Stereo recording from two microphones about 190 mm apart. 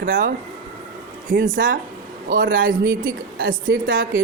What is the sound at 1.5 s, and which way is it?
Speech, 45° right (ahead or behind).